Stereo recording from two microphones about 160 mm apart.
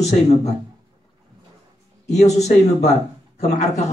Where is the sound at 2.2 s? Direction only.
45° left (ahead or behind).